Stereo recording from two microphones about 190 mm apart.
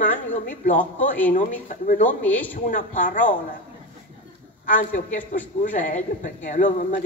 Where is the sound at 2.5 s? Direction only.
45° left (ahead or behind).